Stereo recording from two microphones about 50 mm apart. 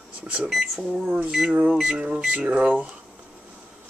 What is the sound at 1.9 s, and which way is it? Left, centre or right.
Speech, right.